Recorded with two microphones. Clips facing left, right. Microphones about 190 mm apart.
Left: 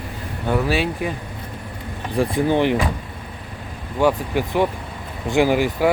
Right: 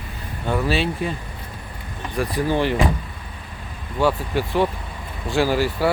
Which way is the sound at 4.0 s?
15° left (ahead or behind).